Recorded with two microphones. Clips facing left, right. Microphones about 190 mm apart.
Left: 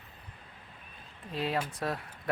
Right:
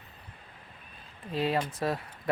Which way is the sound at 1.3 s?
Centre (ahead or behind).